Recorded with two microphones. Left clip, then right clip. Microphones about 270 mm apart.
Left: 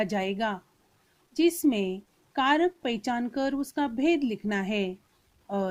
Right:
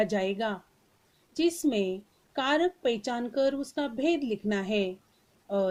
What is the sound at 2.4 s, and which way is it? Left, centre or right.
Speech, left.